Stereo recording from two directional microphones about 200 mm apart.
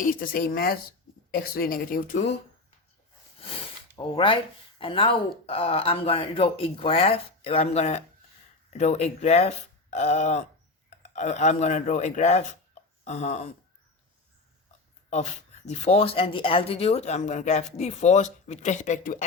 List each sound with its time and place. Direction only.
0.0 s speech: 45° left (ahead or behind)
3.9 s speech: 25° left (ahead or behind)
15.1 s speech: 35° left (ahead or behind)